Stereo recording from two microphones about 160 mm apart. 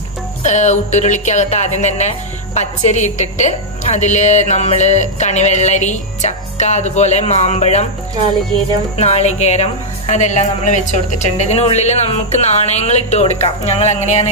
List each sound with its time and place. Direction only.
0.4 s a woman's voice: 45° left (ahead or behind)
8.9 s a woman's voice: 40° left (ahead or behind)